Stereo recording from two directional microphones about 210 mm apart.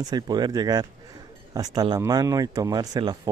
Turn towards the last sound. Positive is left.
turn(degrees=-20)  # may be behind; listen again after turning